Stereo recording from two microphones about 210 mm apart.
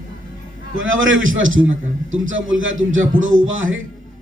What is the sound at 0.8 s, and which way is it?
A man's voice, 65° right (ahead or behind).